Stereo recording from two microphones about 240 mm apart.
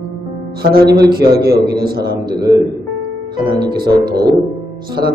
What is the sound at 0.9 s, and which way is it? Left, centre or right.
Music, centre.